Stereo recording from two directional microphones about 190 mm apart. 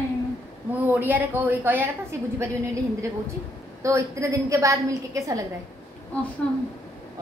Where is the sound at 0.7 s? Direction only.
10° right (ahead or behind).